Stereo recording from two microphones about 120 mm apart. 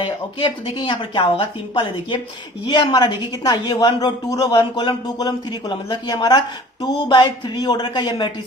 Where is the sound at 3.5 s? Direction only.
35° left (ahead or behind).